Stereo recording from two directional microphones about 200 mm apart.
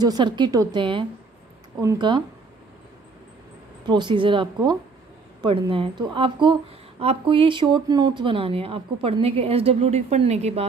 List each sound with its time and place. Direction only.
0.0 s a woman's voice: 20° right (ahead or behind)
3.8 s a woman's voice: 20° right (ahead or behind)